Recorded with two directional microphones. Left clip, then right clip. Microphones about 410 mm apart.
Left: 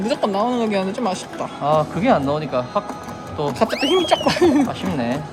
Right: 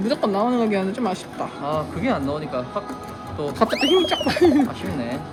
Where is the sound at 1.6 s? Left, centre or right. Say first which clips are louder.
Left 8 dB; left.